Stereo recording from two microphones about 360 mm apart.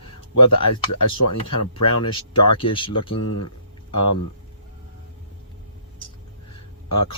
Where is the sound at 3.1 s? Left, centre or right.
Left.